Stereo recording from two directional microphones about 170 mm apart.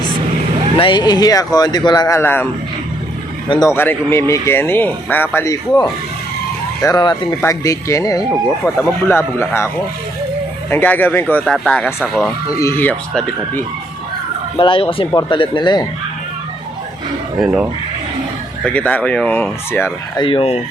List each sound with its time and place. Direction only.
0.8 s speech: 25° left (ahead or behind)
3.5 s speech: 20° left (ahead or behind)
10.7 s speech: 10° left (ahead or behind)
12.5 s speech: 15° left (ahead or behind)
14.6 s speech: 30° left (ahead or behind)
17.4 s speech: 5° right (ahead or behind)
18.6 s speech: 10° left (ahead or behind)
20.1 s speech: 30° left (ahead or behind)